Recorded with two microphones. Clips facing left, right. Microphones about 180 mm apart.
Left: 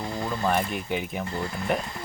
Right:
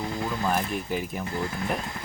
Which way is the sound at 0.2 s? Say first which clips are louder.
Left 3 dB; centre (ahead or behind).